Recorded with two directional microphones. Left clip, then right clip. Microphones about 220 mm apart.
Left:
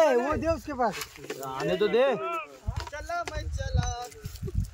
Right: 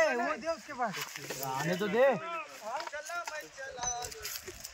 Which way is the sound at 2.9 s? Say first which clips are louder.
Left 5 dB; 35° left (ahead or behind).